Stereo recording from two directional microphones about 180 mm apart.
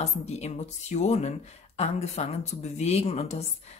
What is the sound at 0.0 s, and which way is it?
Speech, 40° left (ahead or behind).